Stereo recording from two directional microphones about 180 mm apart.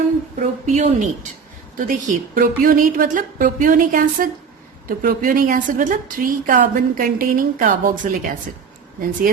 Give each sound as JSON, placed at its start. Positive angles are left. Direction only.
{"t": 0.3, "sound": "a woman's voice", "side_deg": -40}